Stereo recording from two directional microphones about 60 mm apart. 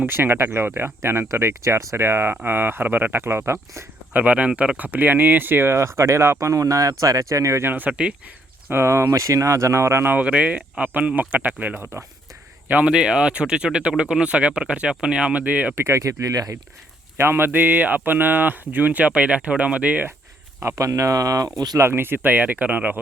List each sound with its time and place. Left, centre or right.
0.0 s speech: right
4.1 s speech: right
5.7 s speech: right
6.5 s speech: right
7.6 s speech: right
8.7 s speech: right
10.0 s speech: right
10.2 s speech: right
11.8 s speech: right
12.8 s speech: centre
15.7 s speech: right
17.2 s speech: right
20.6 s speech: right
21.8 s speech: right